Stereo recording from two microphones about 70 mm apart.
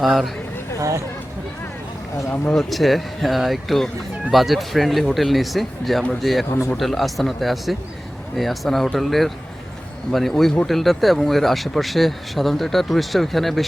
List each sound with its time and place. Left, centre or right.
0.0 s speech: centre
0.8 s speech: right
2.5 s speech: centre